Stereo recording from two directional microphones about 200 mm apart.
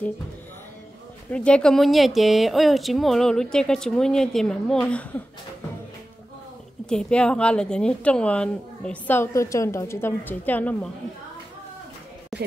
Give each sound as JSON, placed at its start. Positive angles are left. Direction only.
{"t": 1.3, "sound": "speech", "side_deg": 5}
{"t": 6.9, "sound": "a woman's voice", "side_deg": 5}